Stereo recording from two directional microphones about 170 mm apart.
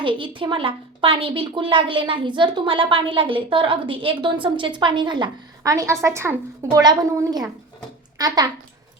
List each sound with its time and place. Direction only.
0.0 s a woman's voice: 30° right (ahead or behind)